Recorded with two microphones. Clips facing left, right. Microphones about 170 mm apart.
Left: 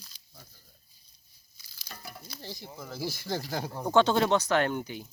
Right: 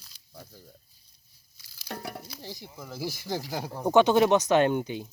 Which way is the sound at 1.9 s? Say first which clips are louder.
Right 9 dB; 65° right (ahead or behind).